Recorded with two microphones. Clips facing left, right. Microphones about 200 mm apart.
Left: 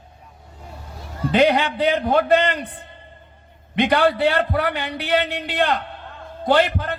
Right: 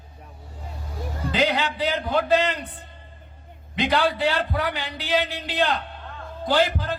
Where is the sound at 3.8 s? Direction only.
60° left (ahead or behind).